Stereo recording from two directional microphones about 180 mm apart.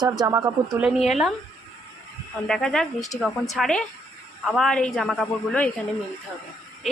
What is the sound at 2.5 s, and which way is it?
A woman's voice, 5° left (ahead or behind).